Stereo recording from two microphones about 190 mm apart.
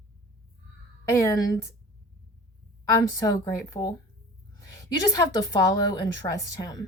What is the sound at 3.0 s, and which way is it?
A woman's voice, 20° left (ahead or behind).